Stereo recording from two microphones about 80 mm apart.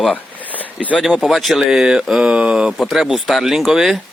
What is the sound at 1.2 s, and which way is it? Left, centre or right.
Speech, centre.